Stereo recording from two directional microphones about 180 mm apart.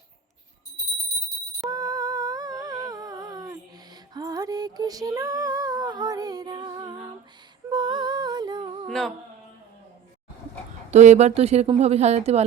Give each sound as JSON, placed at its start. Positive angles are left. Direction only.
{"t": 1.7, "sound": "humming", "side_deg": -20}
{"t": 4.1, "sound": "female singing", "side_deg": -20}
{"t": 7.7, "sound": "humming", "side_deg": -25}
{"t": 8.9, "sound": "music", "side_deg": 0}
{"t": 10.9, "sound": "a woman's voice", "side_deg": -40}